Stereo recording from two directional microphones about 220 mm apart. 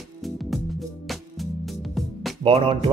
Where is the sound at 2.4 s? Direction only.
25° right (ahead or behind).